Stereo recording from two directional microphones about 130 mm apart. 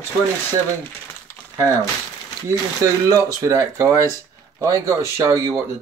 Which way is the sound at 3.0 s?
25° right (ahead or behind).